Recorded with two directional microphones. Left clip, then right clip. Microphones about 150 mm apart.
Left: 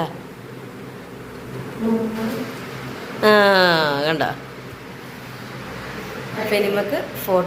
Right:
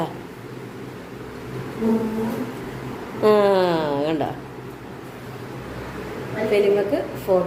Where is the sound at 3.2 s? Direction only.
10° right (ahead or behind).